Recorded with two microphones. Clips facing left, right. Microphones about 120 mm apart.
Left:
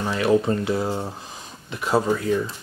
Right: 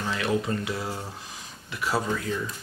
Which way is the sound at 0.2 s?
35° left (ahead or behind).